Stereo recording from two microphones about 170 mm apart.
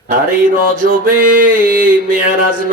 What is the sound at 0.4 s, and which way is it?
A man's voice, 55° right (ahead or behind).